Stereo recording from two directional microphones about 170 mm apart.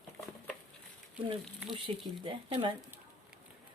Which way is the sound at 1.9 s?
35° right (ahead or behind).